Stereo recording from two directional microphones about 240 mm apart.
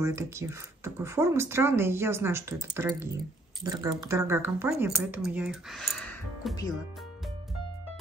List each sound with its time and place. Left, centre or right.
0.0 s speech: centre